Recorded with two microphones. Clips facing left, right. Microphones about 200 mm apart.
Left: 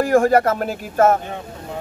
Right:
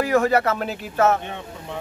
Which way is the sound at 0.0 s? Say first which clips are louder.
Left 4 dB; 50° left (ahead or behind).